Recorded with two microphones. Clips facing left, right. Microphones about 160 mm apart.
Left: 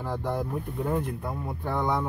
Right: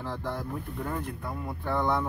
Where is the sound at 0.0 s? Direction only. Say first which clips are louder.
Left 4 dB; 15° left (ahead or behind).